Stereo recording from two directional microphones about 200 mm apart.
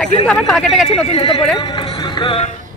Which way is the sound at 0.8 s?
25° left (ahead or behind).